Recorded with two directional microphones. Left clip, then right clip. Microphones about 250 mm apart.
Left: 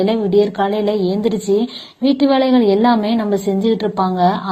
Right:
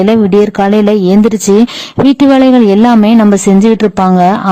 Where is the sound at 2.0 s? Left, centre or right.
Right.